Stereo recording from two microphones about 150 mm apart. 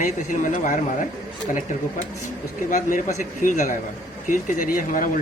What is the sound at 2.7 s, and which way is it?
Speech, 60° left (ahead or behind).